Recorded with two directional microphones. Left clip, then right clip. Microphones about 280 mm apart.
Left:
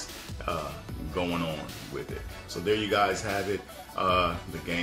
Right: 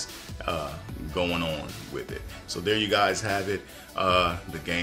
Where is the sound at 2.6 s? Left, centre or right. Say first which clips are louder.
Right 2 dB; centre.